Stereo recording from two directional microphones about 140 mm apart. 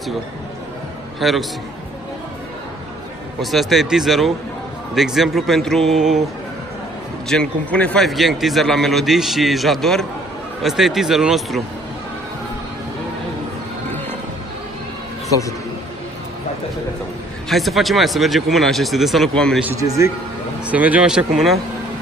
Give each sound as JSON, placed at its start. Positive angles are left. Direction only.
{"t": 1.2, "sound": "a man's voice", "side_deg": 0}
{"t": 3.3, "sound": "a man's voice", "side_deg": 0}
{"t": 7.2, "sound": "a man's voice", "side_deg": 5}
{"t": 17.5, "sound": "a man's voice", "side_deg": 0}
{"t": 19.8, "sound": "a man's voice", "side_deg": -25}
{"t": 20.6, "sound": "speech", "side_deg": -10}